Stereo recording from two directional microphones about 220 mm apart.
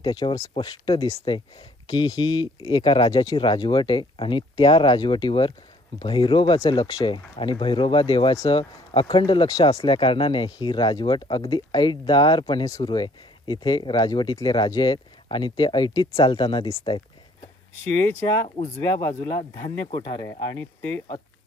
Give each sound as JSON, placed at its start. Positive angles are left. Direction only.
{"t": 0.0, "sound": "speech", "side_deg": 20}
{"t": 16.8, "sound": "a sound", "side_deg": 25}
{"t": 17.9, "sound": "speech", "side_deg": 15}